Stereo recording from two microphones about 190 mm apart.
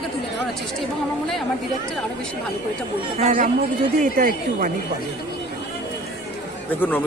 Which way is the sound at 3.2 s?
45° right (ahead or behind).